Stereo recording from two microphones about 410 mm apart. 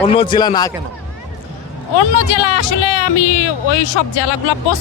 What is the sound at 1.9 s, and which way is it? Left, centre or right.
Speech, left.